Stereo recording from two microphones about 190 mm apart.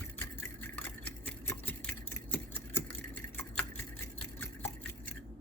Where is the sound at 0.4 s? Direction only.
5° left (ahead or behind).